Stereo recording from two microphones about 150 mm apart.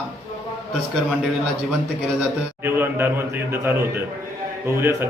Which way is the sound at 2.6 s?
15° right (ahead or behind).